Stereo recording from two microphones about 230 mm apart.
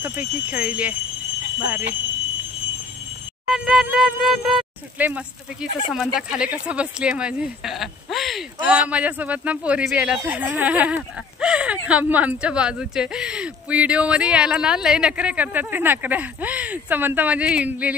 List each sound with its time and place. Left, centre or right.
0.0 s speech: centre
3.4 s speech: centre